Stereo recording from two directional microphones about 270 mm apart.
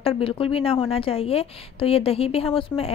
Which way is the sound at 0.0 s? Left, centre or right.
Centre.